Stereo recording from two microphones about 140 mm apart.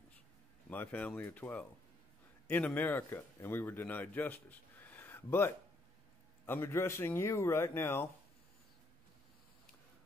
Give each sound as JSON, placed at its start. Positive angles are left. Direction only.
{"t": 0.7, "sound": "speech", "side_deg": 10}